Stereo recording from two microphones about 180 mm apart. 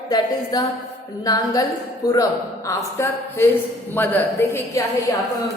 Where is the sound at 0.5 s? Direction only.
25° left (ahead or behind).